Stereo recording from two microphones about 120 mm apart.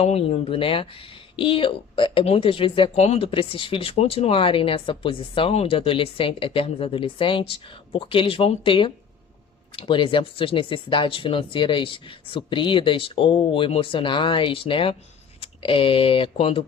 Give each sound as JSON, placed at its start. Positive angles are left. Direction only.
{"t": 0.0, "sound": "speech", "side_deg": 60}
{"t": 3.9, "sound": "speech", "side_deg": 60}